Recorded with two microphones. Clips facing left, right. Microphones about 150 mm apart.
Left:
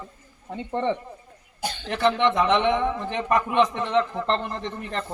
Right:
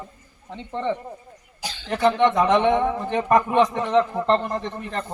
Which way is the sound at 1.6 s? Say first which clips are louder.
Left 4 dB; 55° left (ahead or behind).